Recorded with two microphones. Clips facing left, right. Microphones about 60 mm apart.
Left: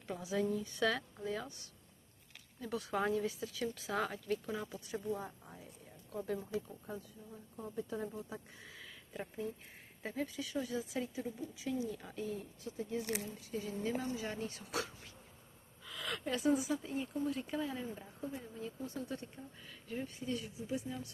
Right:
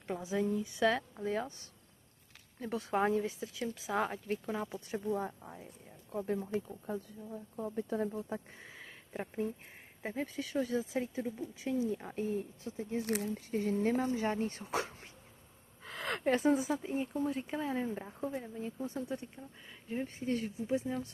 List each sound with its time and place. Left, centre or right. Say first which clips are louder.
0.0 s speech: right 2 dB; right
1.2 s speech: right 6 dB; right
2.6 s speech: right 4 dB; right; by 4.0 s centre
4.0 s speech: right 2 dB; right
8.6 s a sound: right 2 dB; right
10.0 s speech: right 2 dB; right
13.2 s speech: right 7 dB; right
20.2 s speech: right 6 dB; right
20.7 s speech: right 6 dB; right